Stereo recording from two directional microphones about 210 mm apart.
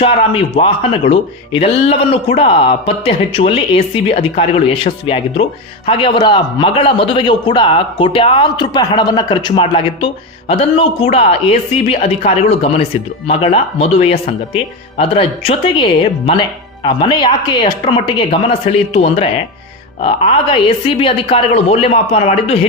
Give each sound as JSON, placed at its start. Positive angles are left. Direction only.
{"t": 0.0, "sound": "speech", "side_deg": 25}